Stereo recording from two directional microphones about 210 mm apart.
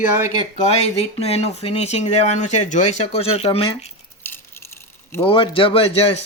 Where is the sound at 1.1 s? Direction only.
30° left (ahead or behind).